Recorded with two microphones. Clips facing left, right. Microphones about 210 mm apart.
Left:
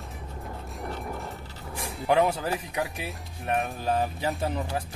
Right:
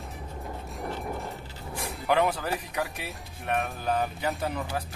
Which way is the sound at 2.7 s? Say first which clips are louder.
Left 1 dB; centre (ahead or behind).